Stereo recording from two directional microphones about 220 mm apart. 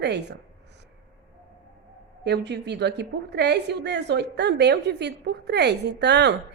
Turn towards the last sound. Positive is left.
turn(degrees=-50)  # may be behind; listen again after turning